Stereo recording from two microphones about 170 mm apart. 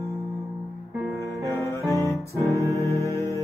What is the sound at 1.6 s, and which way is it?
Music, 20° left (ahead or behind).